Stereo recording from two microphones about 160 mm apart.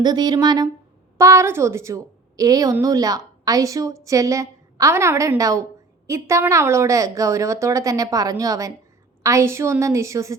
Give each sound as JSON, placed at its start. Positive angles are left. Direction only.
{"t": 0.0, "sound": "a woman's voice", "side_deg": -25}